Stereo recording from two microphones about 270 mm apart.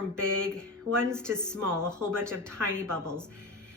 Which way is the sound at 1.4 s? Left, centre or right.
Centre.